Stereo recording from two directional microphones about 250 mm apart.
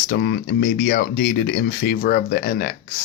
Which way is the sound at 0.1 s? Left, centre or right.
Left.